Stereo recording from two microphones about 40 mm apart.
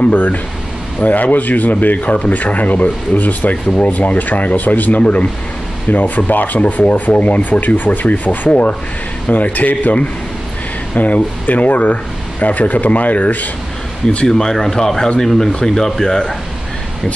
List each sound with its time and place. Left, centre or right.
0.1 s speech: left
11.0 s speech: left
14.2 s speech: centre